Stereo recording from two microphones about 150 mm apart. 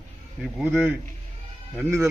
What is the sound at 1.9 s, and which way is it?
Speech, 20° right (ahead or behind).